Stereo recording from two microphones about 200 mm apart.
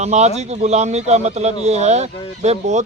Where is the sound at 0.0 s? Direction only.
35° right (ahead or behind).